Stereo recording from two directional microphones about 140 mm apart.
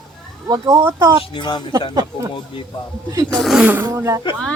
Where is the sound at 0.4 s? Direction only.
25° right (ahead or behind).